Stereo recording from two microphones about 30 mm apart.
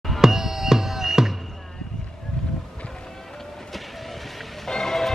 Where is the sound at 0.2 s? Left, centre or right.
Centre.